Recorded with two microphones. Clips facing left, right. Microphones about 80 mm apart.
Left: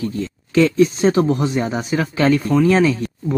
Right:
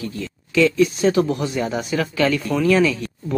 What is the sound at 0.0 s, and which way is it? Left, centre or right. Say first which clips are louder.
Speech: left 5 dB; left.